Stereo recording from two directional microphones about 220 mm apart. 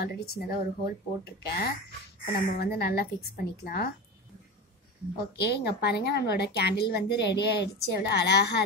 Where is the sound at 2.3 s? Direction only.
45° left (ahead or behind).